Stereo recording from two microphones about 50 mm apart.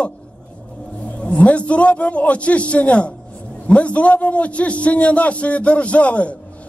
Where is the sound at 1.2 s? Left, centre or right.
Left.